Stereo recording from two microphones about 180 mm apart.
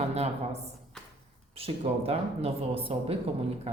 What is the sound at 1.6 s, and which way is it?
Speech, 35° right (ahead or behind).